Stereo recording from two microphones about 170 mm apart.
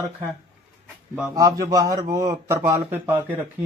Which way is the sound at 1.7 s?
20° right (ahead or behind).